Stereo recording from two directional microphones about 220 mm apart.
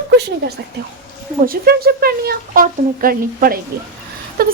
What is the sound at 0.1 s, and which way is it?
Speech, 50° right (ahead or behind).